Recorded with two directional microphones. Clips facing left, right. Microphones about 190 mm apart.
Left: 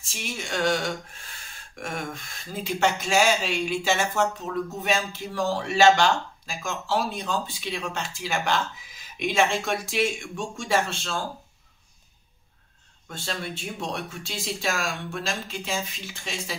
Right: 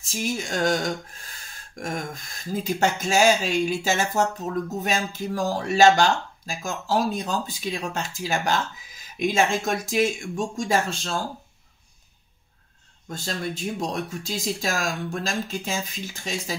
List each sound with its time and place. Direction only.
0.0 s speech: 40° right (ahead or behind)
13.1 s speech: 40° right (ahead or behind)